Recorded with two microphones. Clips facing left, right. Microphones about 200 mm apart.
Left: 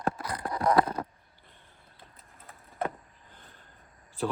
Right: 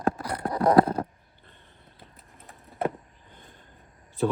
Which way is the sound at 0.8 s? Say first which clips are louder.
Right 8 dB; 30° right (ahead or behind).